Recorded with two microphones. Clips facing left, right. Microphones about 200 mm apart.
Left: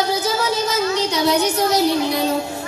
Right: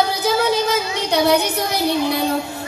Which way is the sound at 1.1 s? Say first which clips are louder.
Right 6 dB; 60° right (ahead or behind).